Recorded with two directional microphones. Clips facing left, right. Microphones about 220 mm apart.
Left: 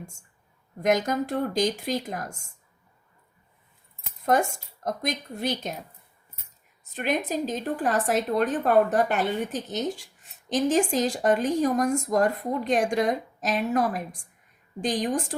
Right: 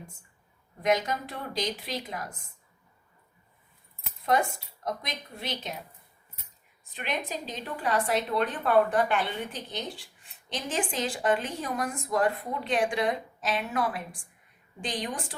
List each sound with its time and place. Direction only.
0.0 s a sound: 45° left (ahead or behind)
0.8 s a woman's voice: 45° left (ahead or behind)
4.2 s a woman's voice: 45° left (ahead or behind)
6.9 s a woman's voice: 45° left (ahead or behind)